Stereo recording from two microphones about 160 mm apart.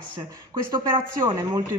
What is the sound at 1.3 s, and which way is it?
Speech, 25° right (ahead or behind).